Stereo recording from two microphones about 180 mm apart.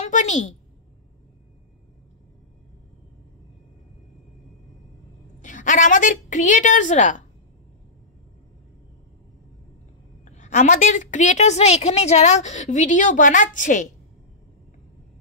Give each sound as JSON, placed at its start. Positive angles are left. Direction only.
{"t": 0.0, "sound": "a woman's voice", "side_deg": 40}
{"t": 5.4, "sound": "a woman's voice", "side_deg": 45}
{"t": 10.2, "sound": "a woman's voice", "side_deg": 40}